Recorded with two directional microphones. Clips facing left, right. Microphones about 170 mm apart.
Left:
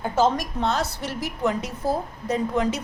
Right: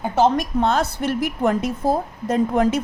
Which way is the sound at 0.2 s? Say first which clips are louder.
Right 4 dB; 55° right (ahead or behind).